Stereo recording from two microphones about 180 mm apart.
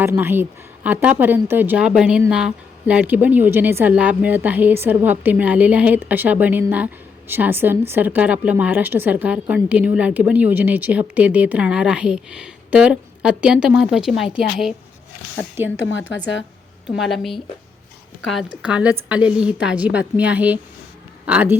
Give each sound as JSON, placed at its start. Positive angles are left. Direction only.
{"t": 0.0, "sound": "a woman's voice", "side_deg": -10}
{"t": 15.9, "sound": "a woman's voice", "side_deg": 90}
{"t": 16.9, "sound": "a woman's voice", "side_deg": 0}
{"t": 18.6, "sound": "a woman's voice", "side_deg": -5}